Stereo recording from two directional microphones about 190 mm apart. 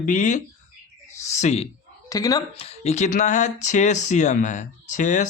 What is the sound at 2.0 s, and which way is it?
Speech, 20° left (ahead or behind).